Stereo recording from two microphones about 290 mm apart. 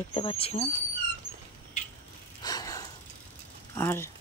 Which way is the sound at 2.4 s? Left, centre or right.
Centre.